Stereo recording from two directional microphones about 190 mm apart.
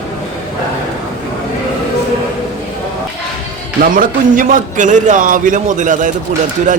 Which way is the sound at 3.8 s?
45° right (ahead or behind).